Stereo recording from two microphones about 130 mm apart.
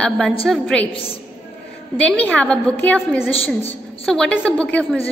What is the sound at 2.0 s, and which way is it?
A woman's voice, 10° left (ahead or behind).